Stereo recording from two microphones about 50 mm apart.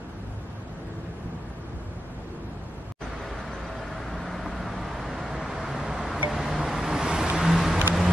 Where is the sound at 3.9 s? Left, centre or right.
Centre.